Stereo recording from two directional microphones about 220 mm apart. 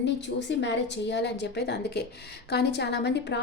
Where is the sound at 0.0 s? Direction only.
50° left (ahead or behind).